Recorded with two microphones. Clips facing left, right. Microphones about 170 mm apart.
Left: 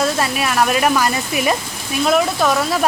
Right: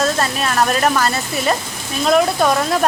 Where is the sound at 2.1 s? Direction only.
Centre (ahead or behind).